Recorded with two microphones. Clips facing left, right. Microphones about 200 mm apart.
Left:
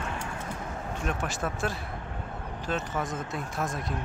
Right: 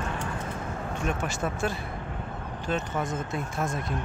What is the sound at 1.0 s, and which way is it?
Speech, centre (ahead or behind).